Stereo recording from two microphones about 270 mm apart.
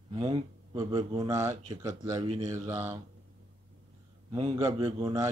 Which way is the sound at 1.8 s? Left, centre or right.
Centre.